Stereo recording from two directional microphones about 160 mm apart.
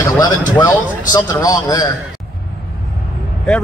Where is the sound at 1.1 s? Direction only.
25° left (ahead or behind).